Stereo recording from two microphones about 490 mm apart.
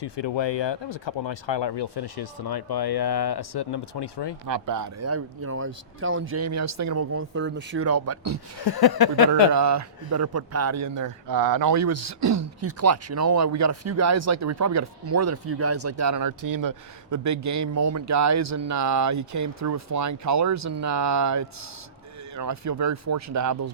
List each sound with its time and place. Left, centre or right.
0.0 s speech: left
4.4 s speech: right
8.6 s speech: left
9.5 s a man's voice: right